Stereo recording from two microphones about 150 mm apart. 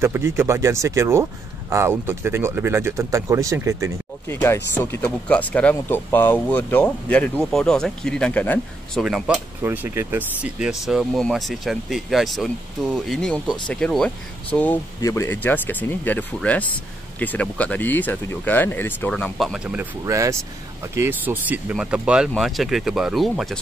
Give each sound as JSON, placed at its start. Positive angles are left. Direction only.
{"t": 0.0, "sound": "speech", "side_deg": -15}
{"t": 4.3, "sound": "speech", "side_deg": 15}
{"t": 9.0, "sound": "speech", "side_deg": -5}
{"t": 9.6, "sound": "speech", "side_deg": -15}
{"t": 15.0, "sound": "speech", "side_deg": 20}
{"t": 20.1, "sound": "speech", "side_deg": -20}